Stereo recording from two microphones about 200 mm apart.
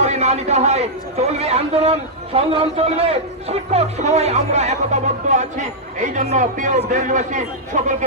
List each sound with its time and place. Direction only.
0.0 s a man's voice: 35° right (ahead or behind)